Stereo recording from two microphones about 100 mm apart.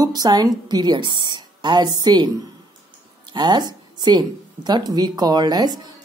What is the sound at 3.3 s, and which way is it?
A woman's voice, 45° right (ahead or behind).